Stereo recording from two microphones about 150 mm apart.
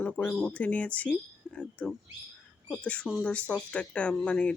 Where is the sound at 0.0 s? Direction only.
10° left (ahead or behind).